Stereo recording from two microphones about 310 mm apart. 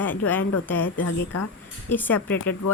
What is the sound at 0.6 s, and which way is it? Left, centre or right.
Speech, centre.